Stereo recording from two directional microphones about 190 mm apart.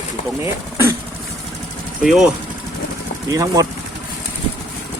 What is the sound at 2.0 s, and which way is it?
Speech, centre (ahead or behind).